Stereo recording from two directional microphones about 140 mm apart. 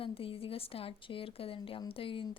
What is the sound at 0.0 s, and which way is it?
A woman's voice, 40° left (ahead or behind).